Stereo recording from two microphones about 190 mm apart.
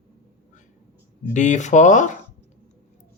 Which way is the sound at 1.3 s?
40° left (ahead or behind).